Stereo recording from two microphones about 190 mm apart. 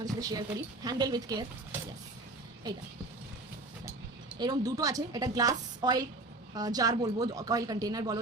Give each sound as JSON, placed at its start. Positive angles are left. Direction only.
{"t": 0.0, "sound": "a woman's voice", "side_deg": -20}
{"t": 4.4, "sound": "a woman's voice", "side_deg": -20}